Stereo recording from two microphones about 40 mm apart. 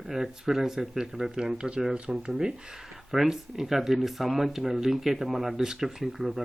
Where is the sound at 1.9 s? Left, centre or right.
Right.